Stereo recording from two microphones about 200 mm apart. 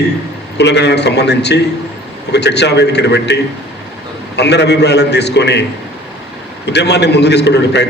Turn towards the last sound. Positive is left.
turn(degrees=60)  # may be behind; listen again after turning